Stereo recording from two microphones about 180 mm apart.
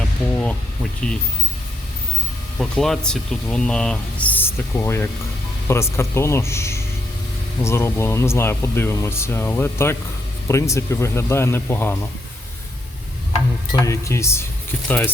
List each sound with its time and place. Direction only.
1.0 s speech: 5° left (ahead or behind)
2.6 s speech: centre (ahead or behind)
13.8 s speech: 15° left (ahead or behind)